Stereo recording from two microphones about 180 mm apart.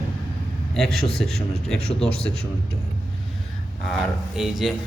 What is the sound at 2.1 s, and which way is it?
Speech, 35° left (ahead or behind).